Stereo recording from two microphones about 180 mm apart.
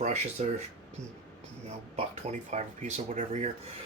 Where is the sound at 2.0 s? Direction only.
40° right (ahead or behind).